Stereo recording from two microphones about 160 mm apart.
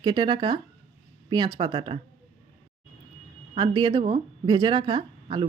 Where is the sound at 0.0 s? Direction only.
25° right (ahead or behind).